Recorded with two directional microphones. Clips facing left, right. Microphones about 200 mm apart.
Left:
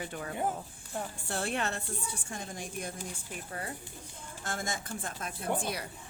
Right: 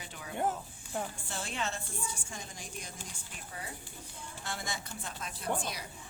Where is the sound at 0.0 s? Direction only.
55° left (ahead or behind).